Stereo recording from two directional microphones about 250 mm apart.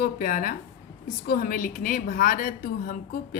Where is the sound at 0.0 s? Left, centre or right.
Left.